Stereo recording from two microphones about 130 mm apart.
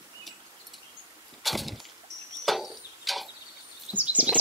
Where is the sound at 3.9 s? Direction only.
10° right (ahead or behind).